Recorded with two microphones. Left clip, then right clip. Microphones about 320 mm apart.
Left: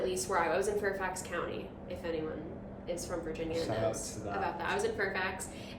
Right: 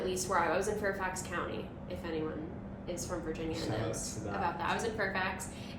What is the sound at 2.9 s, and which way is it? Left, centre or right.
A woman's voice, centre.